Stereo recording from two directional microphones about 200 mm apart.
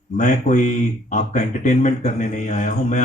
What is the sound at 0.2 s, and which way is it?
A man's voice, 40° left (ahead or behind).